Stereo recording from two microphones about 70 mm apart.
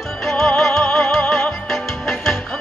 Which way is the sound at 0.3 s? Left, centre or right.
Centre.